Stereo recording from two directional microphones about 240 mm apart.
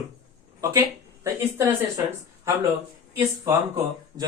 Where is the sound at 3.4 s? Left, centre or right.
Centre.